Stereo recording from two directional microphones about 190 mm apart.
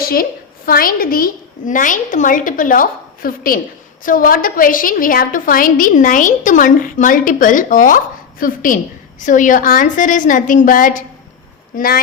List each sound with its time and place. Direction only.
0.0 s a woman's voice: 50° left (ahead or behind)